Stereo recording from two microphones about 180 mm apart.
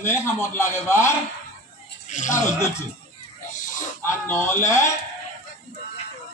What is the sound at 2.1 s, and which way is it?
Speech, 45° left (ahead or behind).